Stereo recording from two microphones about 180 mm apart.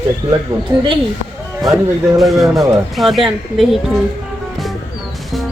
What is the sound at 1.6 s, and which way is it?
Speech, centre (ahead or behind).